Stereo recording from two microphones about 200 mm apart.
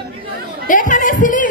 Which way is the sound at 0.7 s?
40° left (ahead or behind).